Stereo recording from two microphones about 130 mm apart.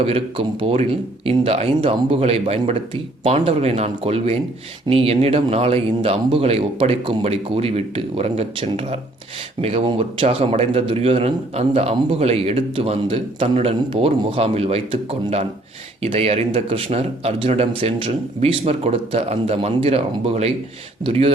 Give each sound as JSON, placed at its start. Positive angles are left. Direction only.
{"t": 0.0, "sound": "speech", "side_deg": -45}
{"t": 16.0, "sound": "speech", "side_deg": -50}